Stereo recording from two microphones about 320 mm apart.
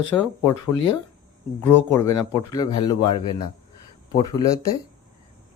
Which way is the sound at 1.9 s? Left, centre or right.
Centre.